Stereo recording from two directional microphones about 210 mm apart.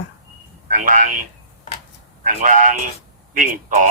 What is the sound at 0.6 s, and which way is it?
Speech, 40° right (ahead or behind).